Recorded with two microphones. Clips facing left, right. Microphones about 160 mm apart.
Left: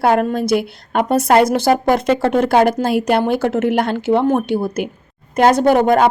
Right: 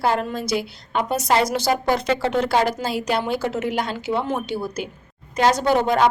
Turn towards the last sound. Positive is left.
turn(degrees=55)  # may be behind; listen again after turning